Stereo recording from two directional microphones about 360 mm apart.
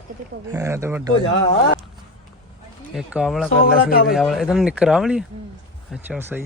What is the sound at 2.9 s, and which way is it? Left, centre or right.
Speech, centre.